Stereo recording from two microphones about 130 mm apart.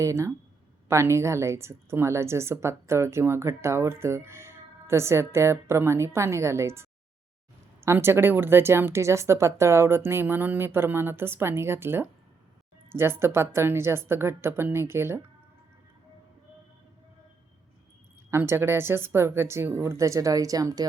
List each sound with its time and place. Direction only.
0.0 s a woman's voice: 20° right (ahead or behind)
7.9 s a woman's voice: 20° right (ahead or behind)
18.3 s a woman's voice: 20° right (ahead or behind)